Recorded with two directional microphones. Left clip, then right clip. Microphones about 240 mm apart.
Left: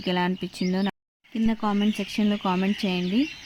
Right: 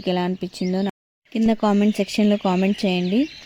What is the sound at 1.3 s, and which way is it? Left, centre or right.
A woman's voice, right.